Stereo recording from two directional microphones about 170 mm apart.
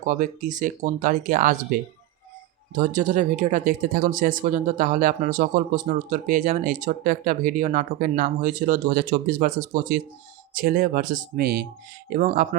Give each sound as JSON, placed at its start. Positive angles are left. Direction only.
{"t": 0.0, "sound": "speech", "side_deg": -50}